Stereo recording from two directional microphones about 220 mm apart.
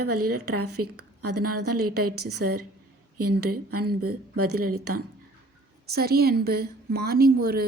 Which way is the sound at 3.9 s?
45° right (ahead or behind).